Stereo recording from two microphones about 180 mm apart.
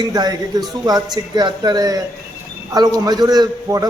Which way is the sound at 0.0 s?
20° right (ahead or behind).